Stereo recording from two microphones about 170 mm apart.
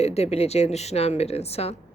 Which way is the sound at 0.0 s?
40° left (ahead or behind).